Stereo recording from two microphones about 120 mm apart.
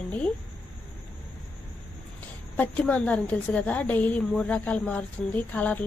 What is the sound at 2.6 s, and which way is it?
A woman's voice, 10° left (ahead or behind).